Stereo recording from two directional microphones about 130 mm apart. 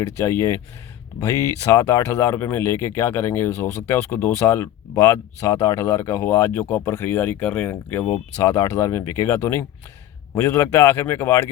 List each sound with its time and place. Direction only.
0.2 s speech: 20° left (ahead or behind)